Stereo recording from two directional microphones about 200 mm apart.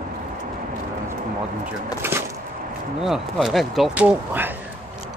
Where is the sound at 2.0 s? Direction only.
10° right (ahead or behind).